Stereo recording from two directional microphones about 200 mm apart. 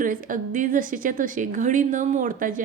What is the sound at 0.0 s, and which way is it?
A woman's voice, 40° right (ahead or behind).